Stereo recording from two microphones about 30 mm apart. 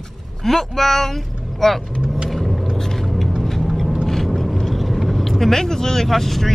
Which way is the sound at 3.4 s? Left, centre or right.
Centre.